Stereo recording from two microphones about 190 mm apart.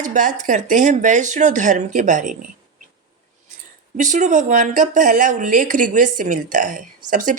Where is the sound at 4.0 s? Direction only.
40° right (ahead or behind).